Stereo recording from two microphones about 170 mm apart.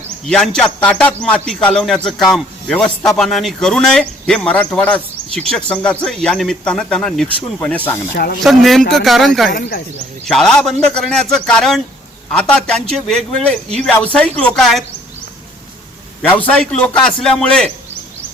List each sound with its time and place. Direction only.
0.3 s a man's voice: 5° left (ahead or behind)
8.1 s speech: 65° left (ahead or behind)
8.4 s a man's voice: centre (ahead or behind)
9.5 s speech: 60° left (ahead or behind)
10.2 s a man's voice: 5° left (ahead or behind)
16.6 s a man's voice: 5° left (ahead or behind)